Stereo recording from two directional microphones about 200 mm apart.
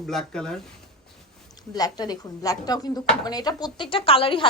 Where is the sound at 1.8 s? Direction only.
20° left (ahead or behind).